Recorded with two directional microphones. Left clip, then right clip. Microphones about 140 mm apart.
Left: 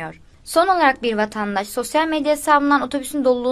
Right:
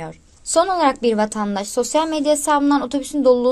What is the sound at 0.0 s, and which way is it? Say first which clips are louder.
A woman's voice: left 1 dB; 45° right (ahead or behind).